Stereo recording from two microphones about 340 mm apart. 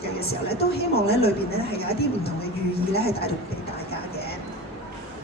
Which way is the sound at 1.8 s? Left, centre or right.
Left.